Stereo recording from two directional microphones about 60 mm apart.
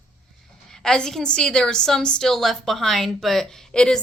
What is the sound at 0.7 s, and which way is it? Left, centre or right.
A woman's voice, centre.